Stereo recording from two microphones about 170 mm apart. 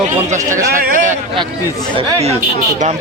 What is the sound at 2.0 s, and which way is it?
Speech, 25° right (ahead or behind).